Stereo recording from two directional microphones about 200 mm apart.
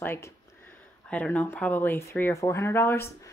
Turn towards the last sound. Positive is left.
turn(degrees=10)  # may be behind; listen again after turning